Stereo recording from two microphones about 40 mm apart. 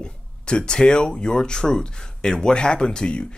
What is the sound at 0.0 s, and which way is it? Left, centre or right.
Speech, left.